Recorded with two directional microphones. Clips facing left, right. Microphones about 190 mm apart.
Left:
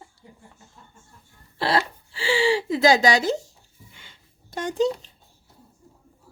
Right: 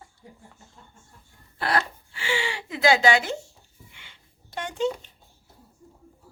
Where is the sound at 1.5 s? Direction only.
30° left (ahead or behind).